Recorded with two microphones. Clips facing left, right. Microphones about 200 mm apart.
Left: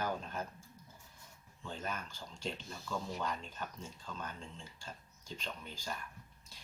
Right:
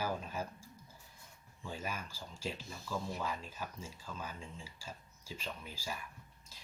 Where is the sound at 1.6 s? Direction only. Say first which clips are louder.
Even; 10° right (ahead or behind).